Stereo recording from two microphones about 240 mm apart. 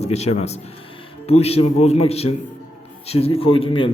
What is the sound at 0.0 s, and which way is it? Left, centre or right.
A man's voice, left.